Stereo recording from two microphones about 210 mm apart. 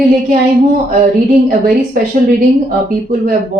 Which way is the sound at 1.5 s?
45° right (ahead or behind).